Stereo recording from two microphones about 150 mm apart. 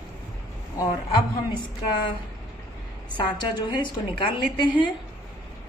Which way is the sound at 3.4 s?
30° left (ahead or behind).